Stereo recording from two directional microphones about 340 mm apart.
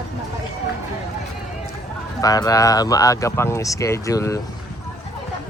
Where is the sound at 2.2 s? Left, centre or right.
Centre.